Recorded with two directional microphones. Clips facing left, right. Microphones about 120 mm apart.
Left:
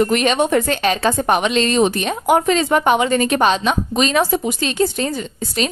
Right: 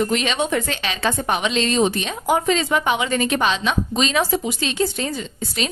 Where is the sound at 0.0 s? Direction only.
55° left (ahead or behind).